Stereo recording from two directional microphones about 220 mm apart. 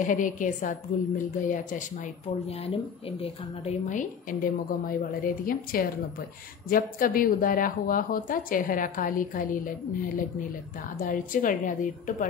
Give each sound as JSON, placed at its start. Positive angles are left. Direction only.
{"t": 0.0, "sound": "a woman's voice", "side_deg": 35}
{"t": 11.0, "sound": "a woman's voice", "side_deg": 40}